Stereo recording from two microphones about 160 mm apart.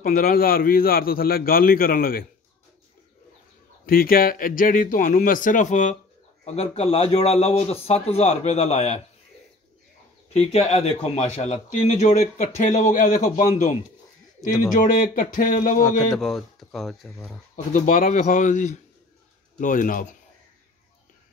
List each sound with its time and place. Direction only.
0.0 s a man's voice: 65° left (ahead or behind)
3.8 s a man's voice: 65° left (ahead or behind); by 9.0 s 40° left (ahead or behind)
10.3 s a man's voice: 40° left (ahead or behind); by 16.0 s 60° left (ahead or behind)
16.2 s speech: centre (ahead or behind)
17.7 s a man's voice: 60° left (ahead or behind)